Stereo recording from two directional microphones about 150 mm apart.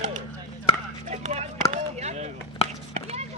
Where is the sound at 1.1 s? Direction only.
50° right (ahead or behind).